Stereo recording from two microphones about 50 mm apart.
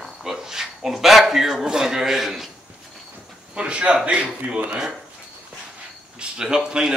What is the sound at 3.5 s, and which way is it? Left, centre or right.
A man's voice, right.